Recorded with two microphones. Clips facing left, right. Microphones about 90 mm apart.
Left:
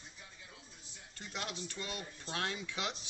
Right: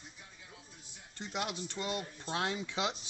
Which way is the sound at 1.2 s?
15° right (ahead or behind).